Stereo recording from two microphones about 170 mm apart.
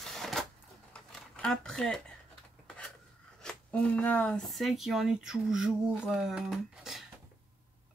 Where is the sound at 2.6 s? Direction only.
5° left (ahead or behind).